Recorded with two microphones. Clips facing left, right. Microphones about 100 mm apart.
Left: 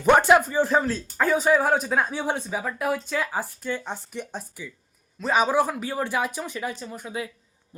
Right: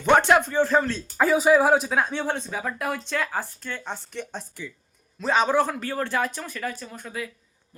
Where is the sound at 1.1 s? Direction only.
5° right (ahead or behind).